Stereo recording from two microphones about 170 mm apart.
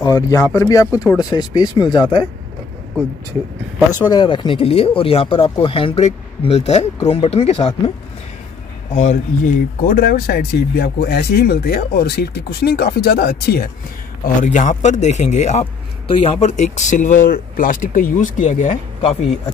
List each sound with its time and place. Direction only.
0.0 s speech: 20° left (ahead or behind)
4.1 s speech: 25° left (ahead or behind)
8.9 s speech: 45° left (ahead or behind)
9.8 s speech: 60° left (ahead or behind)
14.2 s speech: 50° left (ahead or behind)